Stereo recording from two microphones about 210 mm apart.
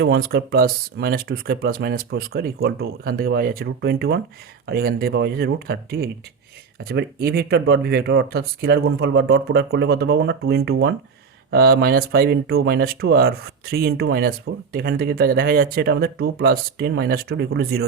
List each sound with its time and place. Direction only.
0.0 s speech: 45° right (ahead or behind)